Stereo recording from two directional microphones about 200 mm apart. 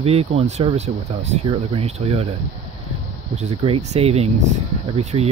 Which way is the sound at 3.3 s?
30° right (ahead or behind).